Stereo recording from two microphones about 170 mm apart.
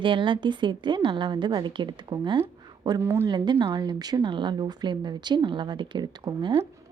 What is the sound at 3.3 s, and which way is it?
A woman's voice, 25° right (ahead or behind).